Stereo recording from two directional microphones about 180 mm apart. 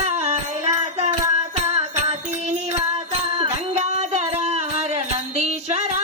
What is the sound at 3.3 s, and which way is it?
Music, 35° right (ahead or behind).